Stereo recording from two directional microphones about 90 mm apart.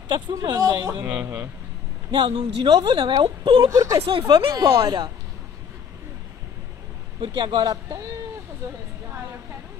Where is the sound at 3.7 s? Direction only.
40° right (ahead or behind).